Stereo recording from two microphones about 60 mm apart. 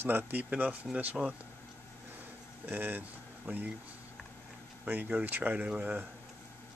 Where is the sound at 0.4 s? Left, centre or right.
Right.